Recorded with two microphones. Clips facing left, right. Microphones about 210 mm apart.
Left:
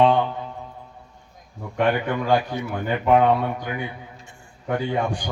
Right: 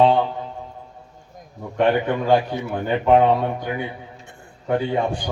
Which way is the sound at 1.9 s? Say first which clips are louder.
Right 3 dB; 30° right (ahead or behind).